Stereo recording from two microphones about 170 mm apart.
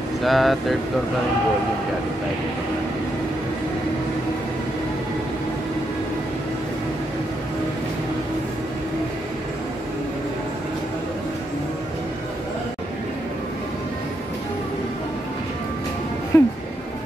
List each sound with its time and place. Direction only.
0.2 s speech: centre (ahead or behind)
16.3 s music: 15° left (ahead or behind)